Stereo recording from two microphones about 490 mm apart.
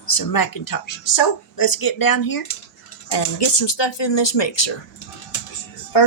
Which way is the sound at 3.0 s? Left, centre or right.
Left.